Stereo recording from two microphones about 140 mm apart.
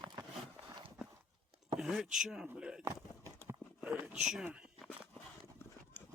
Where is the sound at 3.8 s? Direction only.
5° right (ahead or behind).